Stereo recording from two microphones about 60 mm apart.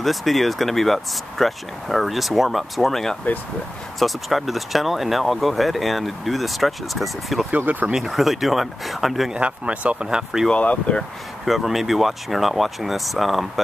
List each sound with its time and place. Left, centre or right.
0.0 s speech: centre
7.5 s speech: right
7.9 s speech: centre
9.3 s speech: right
10.0 s speech: centre
10.5 s speech: left
11.4 s speech: centre